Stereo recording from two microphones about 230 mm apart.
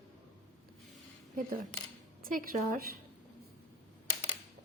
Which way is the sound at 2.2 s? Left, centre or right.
Right.